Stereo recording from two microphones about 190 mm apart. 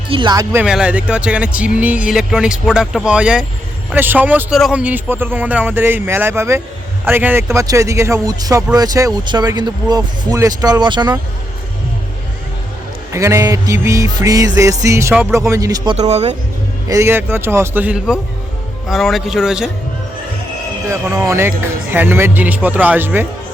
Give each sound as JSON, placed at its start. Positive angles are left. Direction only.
{"t": 0.1, "sound": "speech", "side_deg": -25}
{"t": 0.5, "sound": "speech", "side_deg": -5}
{"t": 3.9, "sound": "music", "side_deg": -10}
{"t": 7.0, "sound": "speech", "side_deg": -10}
{"t": 13.1, "sound": "music", "side_deg": -15}
{"t": 16.0, "sound": "speech", "side_deg": -35}
{"t": 16.9, "sound": "music", "side_deg": -15}
{"t": 18.9, "sound": "speech", "side_deg": 0}
{"t": 20.8, "sound": "music", "side_deg": -15}